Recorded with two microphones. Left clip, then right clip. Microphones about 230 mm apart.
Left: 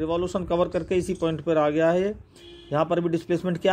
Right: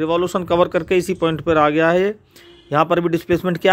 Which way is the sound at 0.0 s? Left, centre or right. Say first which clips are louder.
Right 7 dB; right.